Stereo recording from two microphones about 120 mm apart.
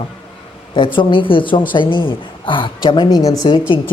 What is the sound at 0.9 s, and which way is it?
A man's voice, 45° left (ahead or behind).